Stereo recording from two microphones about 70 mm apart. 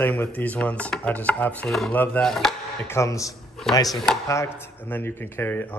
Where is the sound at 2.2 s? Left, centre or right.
Centre.